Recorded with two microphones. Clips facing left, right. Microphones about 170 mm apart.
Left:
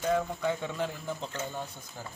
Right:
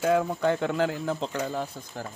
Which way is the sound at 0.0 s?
70° right (ahead or behind).